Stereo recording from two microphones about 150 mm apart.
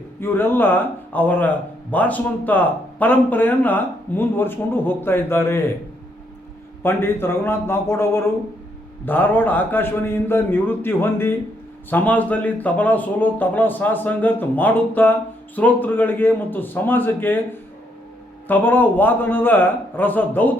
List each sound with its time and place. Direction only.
0.2 s a man's voice: 15° left (ahead or behind)
6.8 s a man's voice: 15° left (ahead or behind)